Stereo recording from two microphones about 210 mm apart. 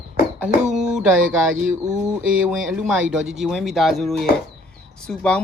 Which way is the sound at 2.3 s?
5° right (ahead or behind).